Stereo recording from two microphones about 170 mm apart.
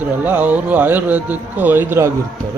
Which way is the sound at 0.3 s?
10° right (ahead or behind).